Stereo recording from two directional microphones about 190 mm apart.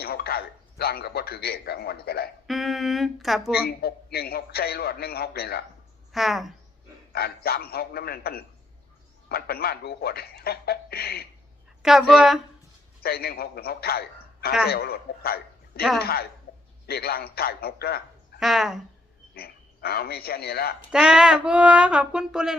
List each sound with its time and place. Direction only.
0.0 s a man's voice: 55° left (ahead or behind)
2.5 s speech: centre (ahead or behind)
3.6 s a man's voice: 55° left (ahead or behind)
6.1 s speech: centre (ahead or behind)
7.1 s a man's voice: 55° left (ahead or behind)
11.8 s speech: centre (ahead or behind)
13.0 s a man's voice: 55° left (ahead or behind)
18.3 s speech: centre (ahead or behind)
19.3 s speech: 55° left (ahead or behind)
20.9 s speech: 5° right (ahead or behind)